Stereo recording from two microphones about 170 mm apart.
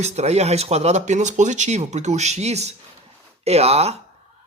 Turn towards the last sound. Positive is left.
turn(degrees=-40)  # may be behind; listen again after turning